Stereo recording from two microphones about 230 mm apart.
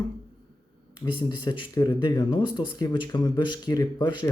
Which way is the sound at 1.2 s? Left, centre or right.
Centre.